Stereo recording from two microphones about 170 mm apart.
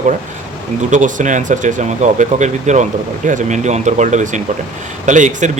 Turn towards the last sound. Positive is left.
turn(degrees=-45)  # may be behind; listen again after turning